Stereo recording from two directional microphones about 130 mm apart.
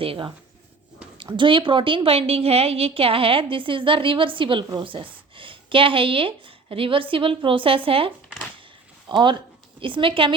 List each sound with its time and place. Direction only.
0.0 s a woman's voice: 45° right (ahead or behind)